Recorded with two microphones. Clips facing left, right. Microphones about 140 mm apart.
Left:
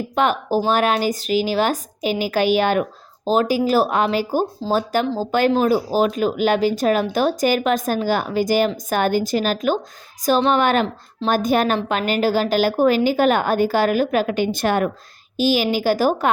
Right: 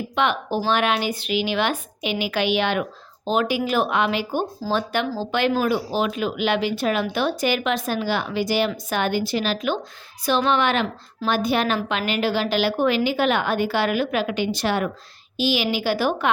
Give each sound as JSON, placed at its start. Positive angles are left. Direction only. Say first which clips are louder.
{"t": 0.2, "sound": "a woman's voice", "louder": "left 4 dB", "side_deg": 40}